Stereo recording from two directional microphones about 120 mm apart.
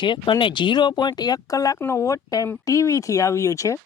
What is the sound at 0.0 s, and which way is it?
Speech, 40° left (ahead or behind).